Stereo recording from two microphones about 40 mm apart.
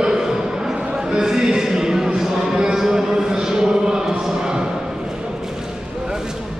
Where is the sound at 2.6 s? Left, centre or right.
Centre.